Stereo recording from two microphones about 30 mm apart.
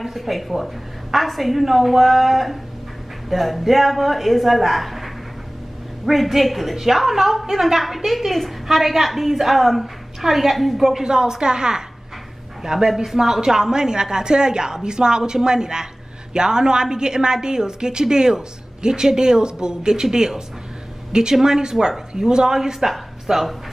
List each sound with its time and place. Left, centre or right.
0.0 s a woman's voice: centre
11.0 s a woman's voice: right
12.6 s a woman's voice: centre
22.1 s a woman's voice: right